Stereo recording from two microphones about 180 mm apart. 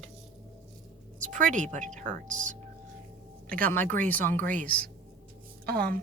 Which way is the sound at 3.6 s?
10° left (ahead or behind).